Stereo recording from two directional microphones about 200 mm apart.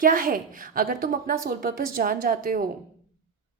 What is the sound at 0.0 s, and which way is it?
A woman's voice, 45° right (ahead or behind).